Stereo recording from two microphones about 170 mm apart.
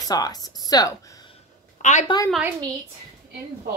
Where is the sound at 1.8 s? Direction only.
45° left (ahead or behind).